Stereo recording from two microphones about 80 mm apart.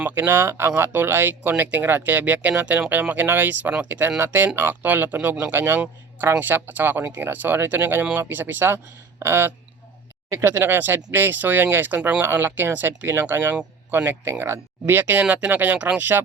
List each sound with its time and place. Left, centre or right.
0.0 s speech: right
11.9 s speech: centre
12.2 s speech: right